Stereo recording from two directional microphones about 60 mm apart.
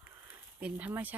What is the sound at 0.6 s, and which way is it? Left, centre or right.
Speech, right.